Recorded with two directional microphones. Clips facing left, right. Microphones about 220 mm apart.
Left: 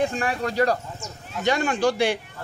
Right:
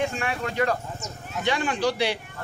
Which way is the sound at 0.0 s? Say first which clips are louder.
Left 3 dB; 35° left (ahead or behind).